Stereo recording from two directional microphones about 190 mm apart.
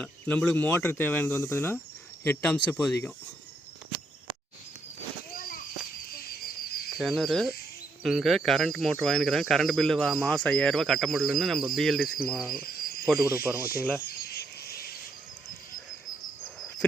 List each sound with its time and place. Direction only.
0.0 s speech: 5° left (ahead or behind)
5.3 s a sound: 50° left (ahead or behind)
6.9 s speech: centre (ahead or behind)
12.6 s cricket: 55° left (ahead or behind)
13.3 s speech: 10° right (ahead or behind)
14.1 s a sound: 55° left (ahead or behind)